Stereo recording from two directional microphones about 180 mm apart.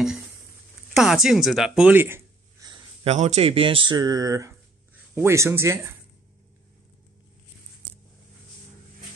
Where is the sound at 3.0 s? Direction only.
40° right (ahead or behind); by 5.9 s 15° right (ahead or behind).